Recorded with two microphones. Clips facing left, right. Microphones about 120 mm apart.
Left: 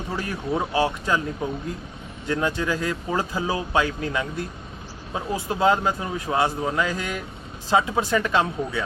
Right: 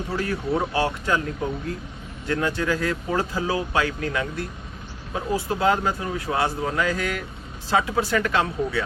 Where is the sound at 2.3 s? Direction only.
20° left (ahead or behind).